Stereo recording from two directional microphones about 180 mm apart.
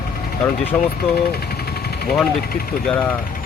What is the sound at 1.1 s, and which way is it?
Speech, 60° left (ahead or behind).